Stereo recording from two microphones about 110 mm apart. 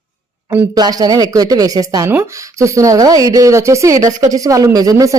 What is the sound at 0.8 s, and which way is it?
Speech, 35° right (ahead or behind).